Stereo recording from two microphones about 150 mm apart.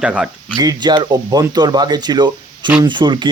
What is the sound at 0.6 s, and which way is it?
Speech, 25° right (ahead or behind).